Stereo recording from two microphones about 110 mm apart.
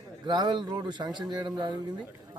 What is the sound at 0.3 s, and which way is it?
A man's voice, 40° right (ahead or behind).